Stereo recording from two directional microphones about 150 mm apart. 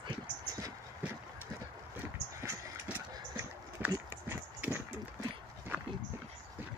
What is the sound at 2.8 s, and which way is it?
Clip-clop, 10° right (ahead or behind).